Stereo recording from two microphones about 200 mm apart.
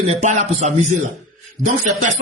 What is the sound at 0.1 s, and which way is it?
Speech, 35° right (ahead or behind).